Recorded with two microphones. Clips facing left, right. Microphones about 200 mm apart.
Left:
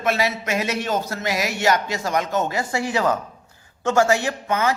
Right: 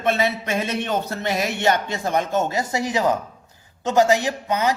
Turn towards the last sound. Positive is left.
turn(degrees=-15)  # may be behind; listen again after turning